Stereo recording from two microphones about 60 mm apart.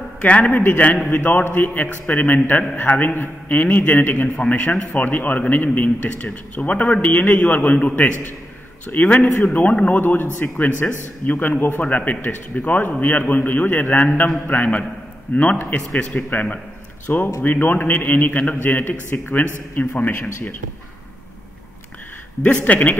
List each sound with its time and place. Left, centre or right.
0.2 s speech: left
4.4 s speech: centre
16.0 s a man's voice: centre
22.4 s speech: left